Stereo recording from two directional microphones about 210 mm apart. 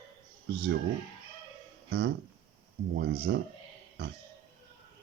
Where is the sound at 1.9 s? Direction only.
55° right (ahead or behind).